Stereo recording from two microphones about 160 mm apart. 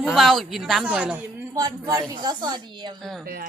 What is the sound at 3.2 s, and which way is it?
Speech, 70° right (ahead or behind).